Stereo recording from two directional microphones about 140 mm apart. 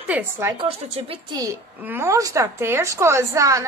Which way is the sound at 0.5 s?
45° right (ahead or behind).